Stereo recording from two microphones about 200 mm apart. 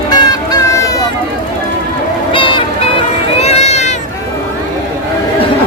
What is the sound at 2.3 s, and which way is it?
Music, 25° left (ahead or behind).